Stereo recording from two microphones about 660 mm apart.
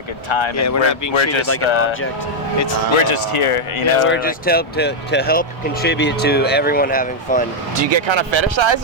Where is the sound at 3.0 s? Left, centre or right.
Left.